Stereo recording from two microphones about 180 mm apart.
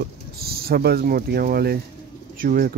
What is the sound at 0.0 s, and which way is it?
Speech, 60° right (ahead or behind).